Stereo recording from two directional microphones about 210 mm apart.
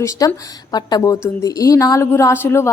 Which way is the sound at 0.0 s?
15° left (ahead or behind).